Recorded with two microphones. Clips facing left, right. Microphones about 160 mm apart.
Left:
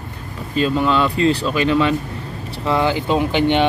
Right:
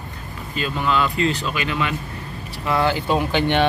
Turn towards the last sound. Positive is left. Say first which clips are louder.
# left 3 dB
turn(degrees=15)  # may be behind; listen again after turning